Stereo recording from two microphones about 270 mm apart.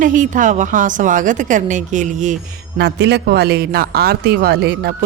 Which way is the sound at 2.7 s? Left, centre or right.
Right.